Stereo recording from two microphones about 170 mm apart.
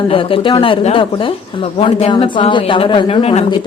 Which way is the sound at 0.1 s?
30° left (ahead or behind).